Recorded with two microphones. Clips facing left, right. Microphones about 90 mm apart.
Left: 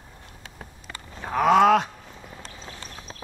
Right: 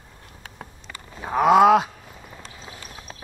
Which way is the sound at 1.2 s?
10° right (ahead or behind).